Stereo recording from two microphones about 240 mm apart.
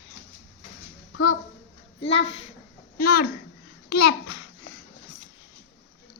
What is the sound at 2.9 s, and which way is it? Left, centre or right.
Speech, left.